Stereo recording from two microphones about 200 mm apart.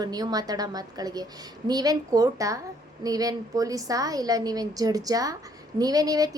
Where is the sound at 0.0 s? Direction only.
20° right (ahead or behind).